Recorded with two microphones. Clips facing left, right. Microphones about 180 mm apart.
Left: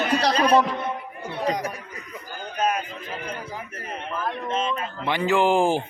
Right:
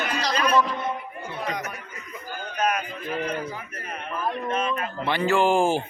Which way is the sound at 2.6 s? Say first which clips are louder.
Left 1 dB; 30° left (ahead or behind).